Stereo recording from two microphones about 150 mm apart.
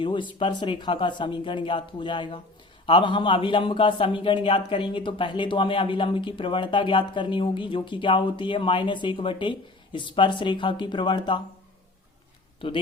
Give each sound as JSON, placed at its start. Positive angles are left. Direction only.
{"t": 0.0, "sound": "a man's voice", "side_deg": 35}
{"t": 12.5, "sound": "speech", "side_deg": 35}